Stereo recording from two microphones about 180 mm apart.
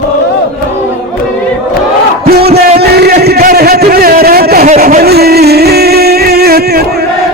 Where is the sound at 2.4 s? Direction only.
60° right (ahead or behind).